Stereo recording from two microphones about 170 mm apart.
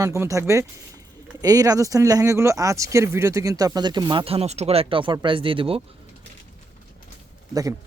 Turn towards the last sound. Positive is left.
turn(degrees=-20)  # may be behind; listen again after turning